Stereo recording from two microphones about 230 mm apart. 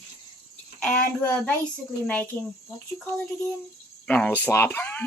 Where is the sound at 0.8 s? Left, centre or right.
Centre.